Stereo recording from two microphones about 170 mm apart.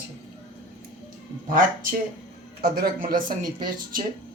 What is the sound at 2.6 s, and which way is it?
Speech, 60° right (ahead or behind).